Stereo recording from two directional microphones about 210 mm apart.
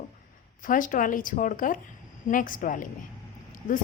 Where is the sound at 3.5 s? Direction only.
40° left (ahead or behind).